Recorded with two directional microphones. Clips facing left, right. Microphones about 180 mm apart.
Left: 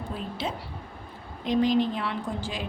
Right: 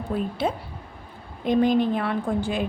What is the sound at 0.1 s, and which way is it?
Speech, 55° right (ahead or behind).